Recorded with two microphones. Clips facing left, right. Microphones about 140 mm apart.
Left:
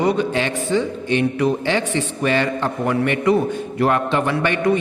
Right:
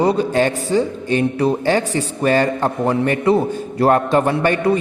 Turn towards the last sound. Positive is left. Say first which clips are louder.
# right 2 dB
turn(degrees=-40)  # may be behind; listen again after turning